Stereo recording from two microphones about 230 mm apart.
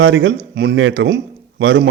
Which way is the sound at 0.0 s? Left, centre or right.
Right.